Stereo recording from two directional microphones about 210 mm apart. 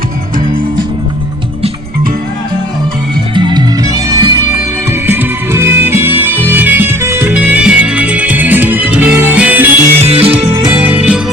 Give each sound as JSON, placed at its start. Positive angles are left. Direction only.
{"t": 3.3, "sound": "music", "side_deg": -20}
{"t": 10.0, "sound": "music", "side_deg": -30}
{"t": 10.5, "sound": "music", "side_deg": -10}